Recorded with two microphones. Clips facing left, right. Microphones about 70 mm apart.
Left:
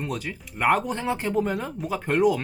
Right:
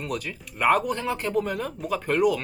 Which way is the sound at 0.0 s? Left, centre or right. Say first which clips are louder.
Even; left.